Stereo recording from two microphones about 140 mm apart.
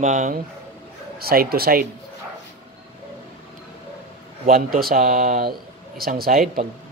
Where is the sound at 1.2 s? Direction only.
90° right.